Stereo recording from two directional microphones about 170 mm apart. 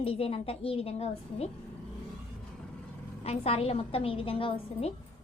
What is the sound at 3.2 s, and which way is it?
A woman's voice, 35° left (ahead or behind).